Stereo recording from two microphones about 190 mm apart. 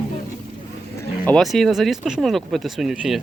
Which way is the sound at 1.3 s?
Centre (ahead or behind).